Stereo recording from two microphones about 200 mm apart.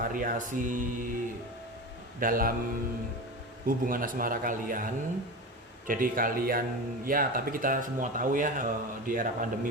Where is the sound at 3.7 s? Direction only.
45° right (ahead or behind).